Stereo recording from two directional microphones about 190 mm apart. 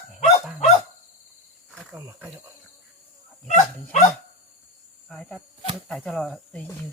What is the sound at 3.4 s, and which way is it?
Speech, 40° left (ahead or behind).